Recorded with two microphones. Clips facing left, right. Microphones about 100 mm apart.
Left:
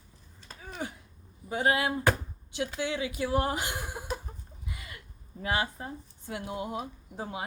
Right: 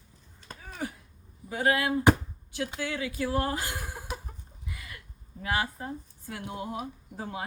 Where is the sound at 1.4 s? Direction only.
25° left (ahead or behind).